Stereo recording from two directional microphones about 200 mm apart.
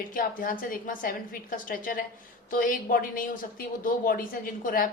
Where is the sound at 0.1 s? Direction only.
45° left (ahead or behind).